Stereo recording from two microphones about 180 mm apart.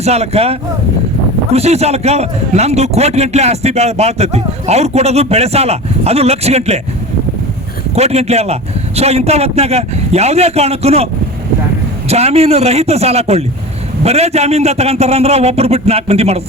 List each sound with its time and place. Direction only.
0.0 s a man's voice: 35° right (ahead or behind)
7.9 s a man's voice: 35° right (ahead or behind)